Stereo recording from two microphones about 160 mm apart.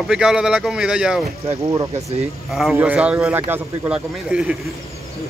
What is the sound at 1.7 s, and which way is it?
Speech, 20° right (ahead or behind).